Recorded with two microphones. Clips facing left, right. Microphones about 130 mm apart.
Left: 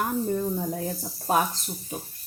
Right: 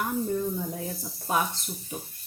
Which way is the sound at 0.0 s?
35° left (ahead or behind).